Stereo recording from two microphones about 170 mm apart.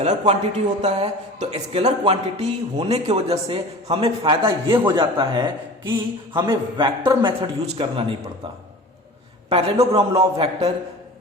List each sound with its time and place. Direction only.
0.0 s speech: 40° right (ahead or behind)
4.4 s a man's voice: 15° right (ahead or behind)
4.9 s a man's voice: 25° right (ahead or behind)
9.5 s speech: 35° right (ahead or behind)